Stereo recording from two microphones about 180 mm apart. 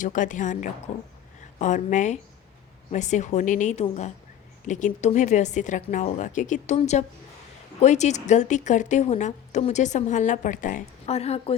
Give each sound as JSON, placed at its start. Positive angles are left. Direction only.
{"t": 0.0, "sound": "a woman's voice", "side_deg": 45}
{"t": 11.0, "sound": "speech", "side_deg": 35}